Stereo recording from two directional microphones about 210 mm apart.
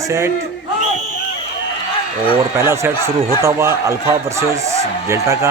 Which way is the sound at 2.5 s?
10° right (ahead or behind).